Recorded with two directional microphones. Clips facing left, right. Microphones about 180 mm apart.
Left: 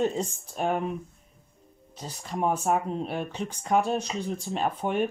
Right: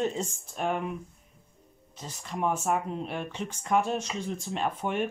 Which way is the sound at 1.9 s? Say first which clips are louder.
Left 3 dB; 35° left (ahead or behind).